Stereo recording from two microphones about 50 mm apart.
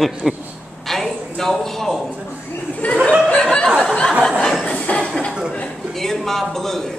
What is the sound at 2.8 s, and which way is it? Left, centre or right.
Speech, left.